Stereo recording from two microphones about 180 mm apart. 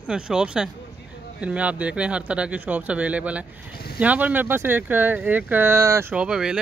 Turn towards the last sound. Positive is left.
turn(degrees=-5)  # may be behind; listen again after turning